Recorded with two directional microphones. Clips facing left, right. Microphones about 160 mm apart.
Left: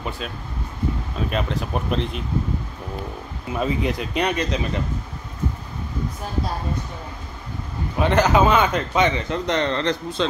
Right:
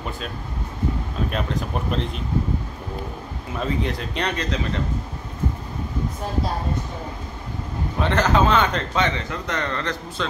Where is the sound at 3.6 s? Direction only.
10° left (ahead or behind).